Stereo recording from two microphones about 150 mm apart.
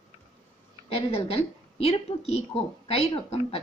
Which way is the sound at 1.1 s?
40° left (ahead or behind).